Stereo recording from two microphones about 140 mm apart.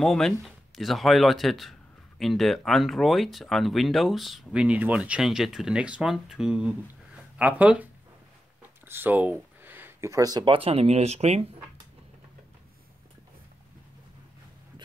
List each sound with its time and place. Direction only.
0.0 s speech: 5° left (ahead or behind); by 11.4 s 50° right (ahead or behind)